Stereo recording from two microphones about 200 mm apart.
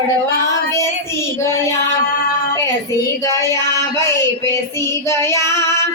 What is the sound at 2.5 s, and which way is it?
Child singing, 15° left (ahead or behind).